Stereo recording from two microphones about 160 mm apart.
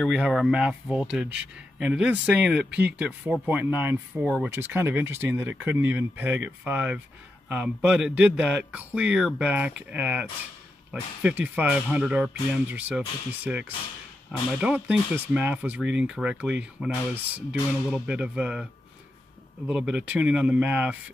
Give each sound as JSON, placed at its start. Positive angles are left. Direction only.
{"t": 0.0, "sound": "speech", "side_deg": 0}
{"t": 2.6, "sound": "speech", "side_deg": -90}
{"t": 3.0, "sound": "speech", "side_deg": -5}
{"t": 4.5, "sound": "speech", "side_deg": -15}
{"t": 19.7, "sound": "speech", "side_deg": -5}